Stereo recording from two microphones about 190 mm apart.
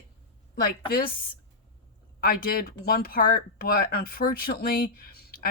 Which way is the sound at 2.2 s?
50° left (ahead or behind).